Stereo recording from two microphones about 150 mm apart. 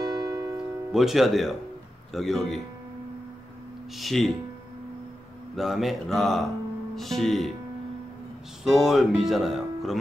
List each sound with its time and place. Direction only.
0.0 s music: 25° right (ahead or behind)
0.9 s speech: centre (ahead or behind)
3.9 s speech: centre (ahead or behind)
5.6 s speech: centre (ahead or behind)
8.6 s speech: centre (ahead or behind)